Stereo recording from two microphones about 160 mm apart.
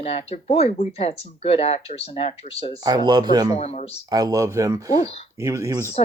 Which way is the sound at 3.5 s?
40° left (ahead or behind).